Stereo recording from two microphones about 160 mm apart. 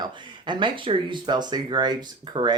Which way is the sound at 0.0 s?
30° right (ahead or behind).